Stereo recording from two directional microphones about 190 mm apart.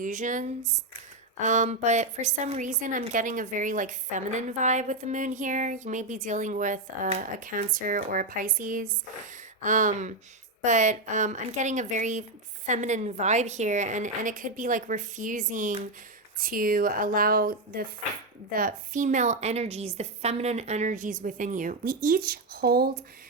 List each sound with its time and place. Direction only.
0.0 s a woman's voice: 40° right (ahead or behind)